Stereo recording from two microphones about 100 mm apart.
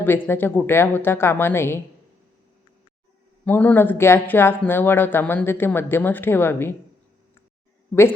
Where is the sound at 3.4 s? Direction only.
15° left (ahead or behind).